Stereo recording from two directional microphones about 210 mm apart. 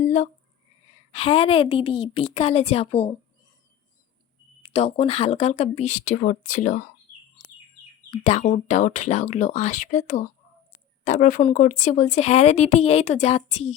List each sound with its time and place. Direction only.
0.0 s a sound: 35° left (ahead or behind)
1.1 s a woman's voice: 25° left (ahead or behind)
4.6 s speech: 30° left (ahead or behind)
8.1 s speech: 30° left (ahead or behind)